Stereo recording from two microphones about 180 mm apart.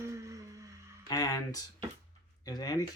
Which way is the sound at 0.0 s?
15° right (ahead or behind).